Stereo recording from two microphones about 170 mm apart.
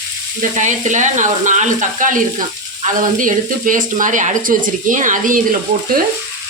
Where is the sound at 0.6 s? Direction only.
45° right (ahead or behind).